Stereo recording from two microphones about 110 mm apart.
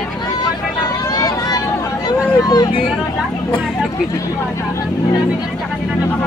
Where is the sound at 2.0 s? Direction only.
40° left (ahead or behind).